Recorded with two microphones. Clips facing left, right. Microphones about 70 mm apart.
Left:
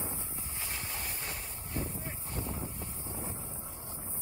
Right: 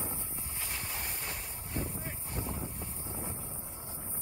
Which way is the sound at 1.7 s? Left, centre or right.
Centre.